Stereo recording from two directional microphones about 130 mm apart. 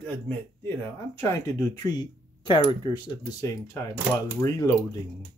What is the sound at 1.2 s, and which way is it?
Speech, 25° left (ahead or behind).